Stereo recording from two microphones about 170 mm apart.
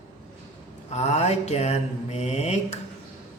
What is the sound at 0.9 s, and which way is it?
Mantra, 40° left (ahead or behind).